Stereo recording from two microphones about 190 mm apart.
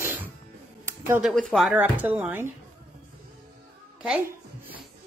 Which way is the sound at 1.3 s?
Centre (ahead or behind).